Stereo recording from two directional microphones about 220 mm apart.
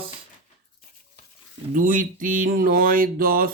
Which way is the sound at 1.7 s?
35° right (ahead or behind).